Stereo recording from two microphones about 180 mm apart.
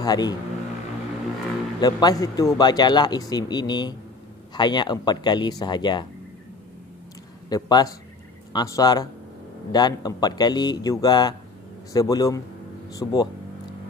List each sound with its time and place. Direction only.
0.0 s speech: 20° left (ahead or behind)
1.8 s speech: 20° left (ahead or behind)
7.4 s a man's voice: 20° left (ahead or behind)